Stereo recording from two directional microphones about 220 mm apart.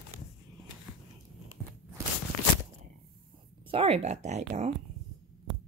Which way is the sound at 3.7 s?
25° right (ahead or behind).